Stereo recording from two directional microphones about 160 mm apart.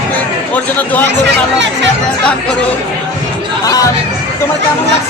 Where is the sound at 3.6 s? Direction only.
20° left (ahead or behind).